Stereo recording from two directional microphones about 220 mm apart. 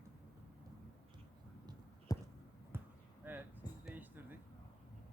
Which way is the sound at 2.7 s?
10° right (ahead or behind).